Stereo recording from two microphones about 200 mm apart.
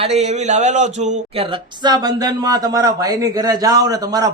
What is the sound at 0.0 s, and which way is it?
A man's voice, 35° right (ahead or behind).